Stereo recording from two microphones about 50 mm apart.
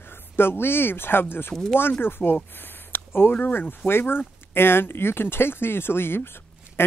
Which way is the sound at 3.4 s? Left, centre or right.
Left.